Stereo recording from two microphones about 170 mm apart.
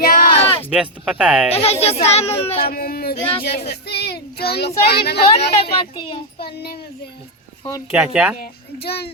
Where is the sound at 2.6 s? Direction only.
65° left (ahead or behind).